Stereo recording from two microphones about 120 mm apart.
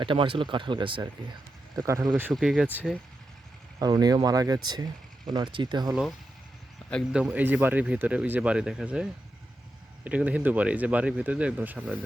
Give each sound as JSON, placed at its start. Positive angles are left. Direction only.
{"t": 0.0, "sound": "speech", "side_deg": -45}
{"t": 1.7, "sound": "speech", "side_deg": -25}
{"t": 2.4, "sound": "speech", "side_deg": -5}
{"t": 3.8, "sound": "speech", "side_deg": -30}
{"t": 5.9, "sound": "speech", "side_deg": 0}